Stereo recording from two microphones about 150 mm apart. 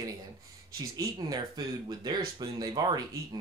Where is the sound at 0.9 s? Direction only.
25° right (ahead or behind).